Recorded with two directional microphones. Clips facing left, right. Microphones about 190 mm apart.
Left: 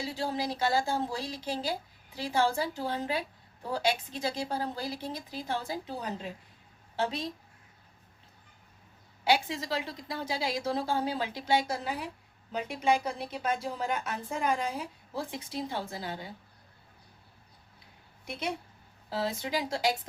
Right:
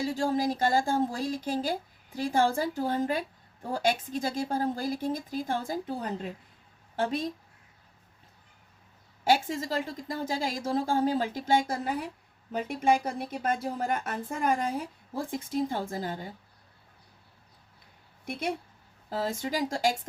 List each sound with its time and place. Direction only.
0.0 s speech: 45° right (ahead or behind)
9.2 s speech: 45° right (ahead or behind)
18.3 s speech: 50° right (ahead or behind)